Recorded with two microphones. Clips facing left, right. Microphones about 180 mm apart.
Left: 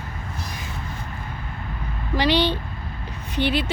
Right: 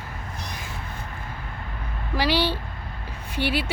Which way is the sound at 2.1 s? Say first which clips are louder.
Left 3 dB; 5° right (ahead or behind).